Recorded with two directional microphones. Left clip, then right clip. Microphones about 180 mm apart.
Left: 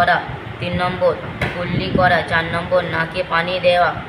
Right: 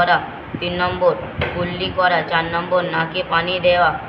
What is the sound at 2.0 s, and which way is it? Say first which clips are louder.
Speech: left 1 dB; 15° left (ahead or behind).